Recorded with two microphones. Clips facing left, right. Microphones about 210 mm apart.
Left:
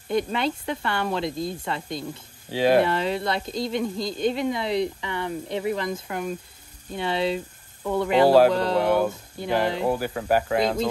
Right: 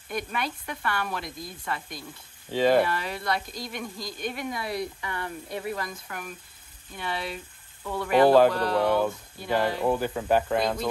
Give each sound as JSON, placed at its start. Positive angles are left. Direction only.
{"t": 0.1, "sound": "speech", "side_deg": 25}
{"t": 2.5, "sound": "speech", "side_deg": 5}
{"t": 2.8, "sound": "speech", "side_deg": 25}
{"t": 8.3, "sound": "speech", "side_deg": 5}
{"t": 8.5, "sound": "speech", "side_deg": 25}
{"t": 8.8, "sound": "speech", "side_deg": 5}
{"t": 10.6, "sound": "speech", "side_deg": 20}